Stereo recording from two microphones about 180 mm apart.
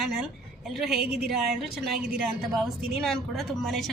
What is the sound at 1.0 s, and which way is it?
Speech, 60° right (ahead or behind).